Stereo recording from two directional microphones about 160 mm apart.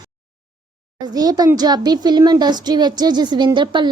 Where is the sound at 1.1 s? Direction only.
25° right (ahead or behind).